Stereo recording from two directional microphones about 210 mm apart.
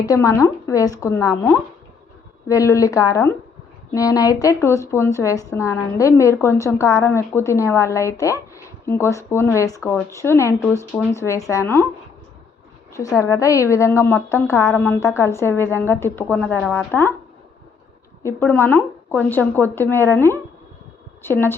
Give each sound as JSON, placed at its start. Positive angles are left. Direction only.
{"t": 0.0, "sound": "speech", "side_deg": 15}
{"t": 12.9, "sound": "speech", "side_deg": 15}
{"t": 18.2, "sound": "speech", "side_deg": 10}